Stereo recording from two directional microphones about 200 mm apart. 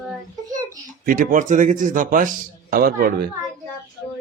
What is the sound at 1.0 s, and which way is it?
A man's voice, 40° right (ahead or behind).